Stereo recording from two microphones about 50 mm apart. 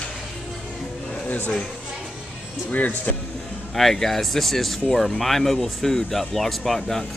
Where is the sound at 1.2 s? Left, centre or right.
Left.